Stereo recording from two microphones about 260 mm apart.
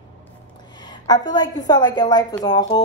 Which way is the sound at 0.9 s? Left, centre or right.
Centre.